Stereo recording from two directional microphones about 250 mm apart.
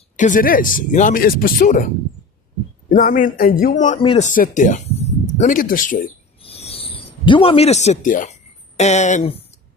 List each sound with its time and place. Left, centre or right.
0.2 s speech: left
2.9 s speech: left
6.4 s a sound: left
8.7 s speech: left